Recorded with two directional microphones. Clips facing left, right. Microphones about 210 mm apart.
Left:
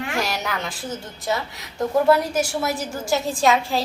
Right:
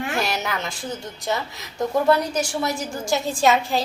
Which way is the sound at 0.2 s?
Centre (ahead or behind).